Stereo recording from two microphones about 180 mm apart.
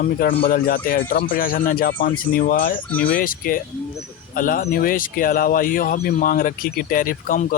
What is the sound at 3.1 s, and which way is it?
Speech, 50° left (ahead or behind).